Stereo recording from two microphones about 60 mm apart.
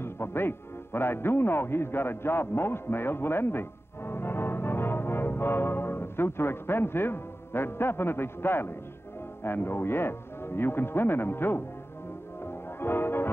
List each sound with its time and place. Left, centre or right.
0.0 s a man's voice: left
12.6 s music: left